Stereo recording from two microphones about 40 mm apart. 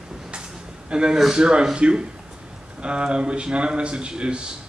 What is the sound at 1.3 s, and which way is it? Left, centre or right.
A man's voice, centre.